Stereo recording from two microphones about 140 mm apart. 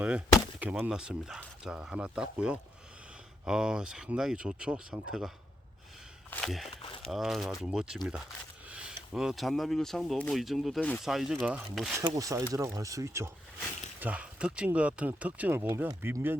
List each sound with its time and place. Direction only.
0.6 s speech: 10° right (ahead or behind)
6.3 s speech: 5° left (ahead or behind)
6.8 s a sound: 40° left (ahead or behind)
7.1 s speech: centre (ahead or behind)
8.7 s a sound: 5° right (ahead or behind)
9.1 s speech: centre (ahead or behind)
10.8 s speech: 10° left (ahead or behind)
11.0 s speech: centre (ahead or behind)
11.9 s speech: 20° right (ahead or behind)
14.0 s speech: 10° right (ahead or behind)